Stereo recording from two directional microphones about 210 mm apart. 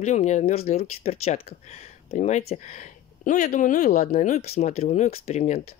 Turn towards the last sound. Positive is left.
turn(degrees=30)  # may be behind; listen again after turning